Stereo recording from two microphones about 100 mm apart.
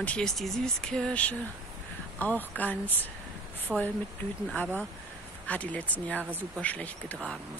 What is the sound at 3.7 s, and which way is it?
Speech, 10° right (ahead or behind).